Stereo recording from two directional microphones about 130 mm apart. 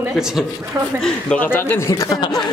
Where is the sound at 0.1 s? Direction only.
5° right (ahead or behind).